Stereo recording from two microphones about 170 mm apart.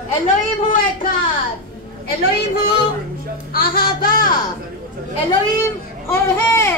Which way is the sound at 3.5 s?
60° left (ahead or behind).